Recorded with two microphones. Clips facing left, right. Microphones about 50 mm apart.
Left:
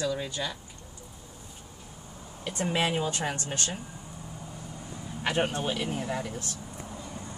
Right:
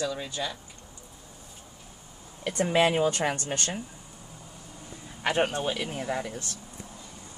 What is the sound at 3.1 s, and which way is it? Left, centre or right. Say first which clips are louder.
Speech: right 3 dB; right.